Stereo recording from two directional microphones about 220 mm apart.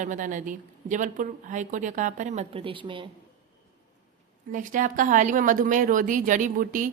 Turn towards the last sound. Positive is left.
turn(degrees=-40)  # may be behind; listen again after turning